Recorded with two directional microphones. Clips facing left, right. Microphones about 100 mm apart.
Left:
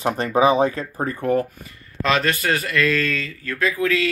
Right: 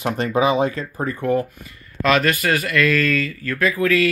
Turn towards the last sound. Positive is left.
turn(degrees=25)  # may be behind; listen again after turning